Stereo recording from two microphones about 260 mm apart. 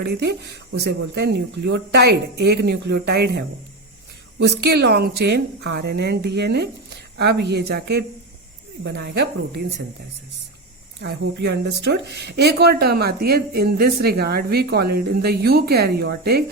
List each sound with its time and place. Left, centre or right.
0.0 s speech: right
4.4 s speech: right
11.0 s speech: right